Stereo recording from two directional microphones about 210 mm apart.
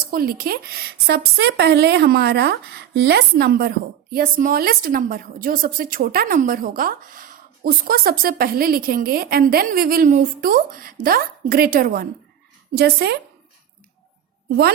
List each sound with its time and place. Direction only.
0.1 s a woman's voice: 45° right (ahead or behind)